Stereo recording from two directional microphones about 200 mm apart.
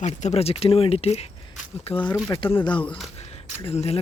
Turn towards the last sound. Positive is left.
turn(degrees=30)  # may be behind; listen again after turning